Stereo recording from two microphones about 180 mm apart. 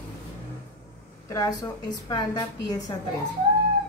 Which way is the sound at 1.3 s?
20° left (ahead or behind).